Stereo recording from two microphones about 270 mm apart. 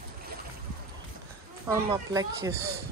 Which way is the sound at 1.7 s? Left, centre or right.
Centre.